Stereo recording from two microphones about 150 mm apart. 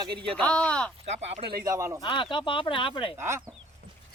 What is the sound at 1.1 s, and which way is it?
Speech, 45° right (ahead or behind).